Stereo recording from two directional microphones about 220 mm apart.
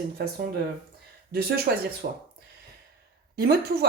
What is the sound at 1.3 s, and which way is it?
Speech, 45° right (ahead or behind).